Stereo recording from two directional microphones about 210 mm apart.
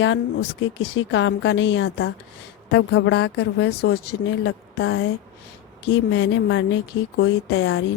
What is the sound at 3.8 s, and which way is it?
A woman's voice, 90° left.